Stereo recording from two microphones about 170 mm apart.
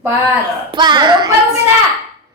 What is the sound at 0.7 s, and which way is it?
Speech, 25° right (ahead or behind).